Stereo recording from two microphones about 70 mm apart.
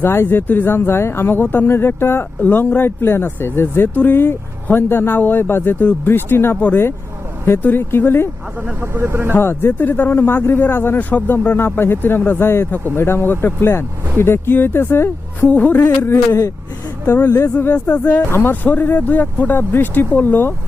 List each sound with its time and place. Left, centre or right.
0.0 s speech: left
8.6 s speech: right
9.3 s speech: left
16.1 s speech: left
17.5 s speech: left